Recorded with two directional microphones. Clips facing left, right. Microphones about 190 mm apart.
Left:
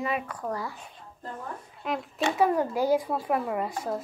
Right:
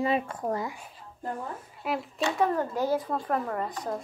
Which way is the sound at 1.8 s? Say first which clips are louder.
Even; 5° right (ahead or behind).